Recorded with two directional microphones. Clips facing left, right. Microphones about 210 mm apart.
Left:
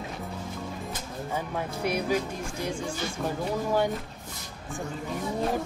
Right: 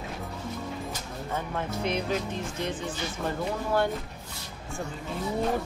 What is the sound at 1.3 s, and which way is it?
Speech, 10° left (ahead or behind).